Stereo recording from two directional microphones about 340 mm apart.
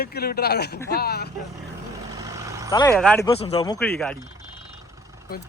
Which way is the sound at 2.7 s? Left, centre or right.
Centre.